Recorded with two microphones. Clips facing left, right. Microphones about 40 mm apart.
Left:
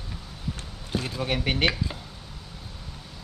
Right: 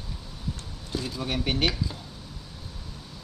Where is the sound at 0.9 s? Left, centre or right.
Left.